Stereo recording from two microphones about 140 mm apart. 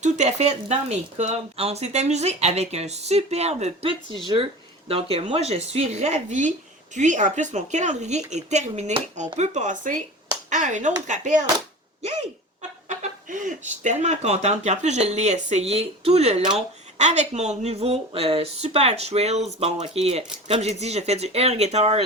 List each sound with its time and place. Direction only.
0.0 s speech: 55° right (ahead or behind)
12.9 s speech: 60° right (ahead or behind)